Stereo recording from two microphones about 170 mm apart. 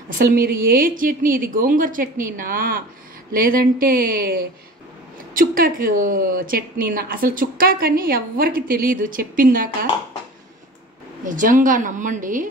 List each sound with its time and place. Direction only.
0.2 s a woman's voice: 60° right (ahead or behind)
5.3 s a woman's voice: 55° right (ahead or behind)
11.2 s a woman's voice: 50° right (ahead or behind)